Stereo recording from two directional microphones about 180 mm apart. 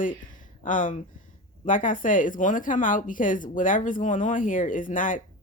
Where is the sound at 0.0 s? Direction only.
45° left (ahead or behind).